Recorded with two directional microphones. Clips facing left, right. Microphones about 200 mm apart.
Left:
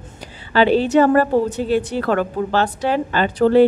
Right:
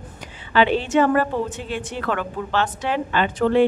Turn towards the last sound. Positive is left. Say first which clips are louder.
# left 4 dB
turn(degrees=35)  # may be behind; listen again after turning